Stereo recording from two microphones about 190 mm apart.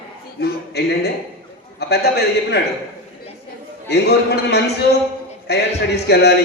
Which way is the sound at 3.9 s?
60° left (ahead or behind).